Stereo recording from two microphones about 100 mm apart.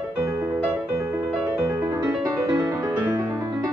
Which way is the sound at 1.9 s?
30° right (ahead or behind).